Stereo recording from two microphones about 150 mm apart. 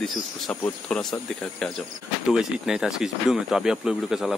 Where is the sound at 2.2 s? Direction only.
5° right (ahead or behind).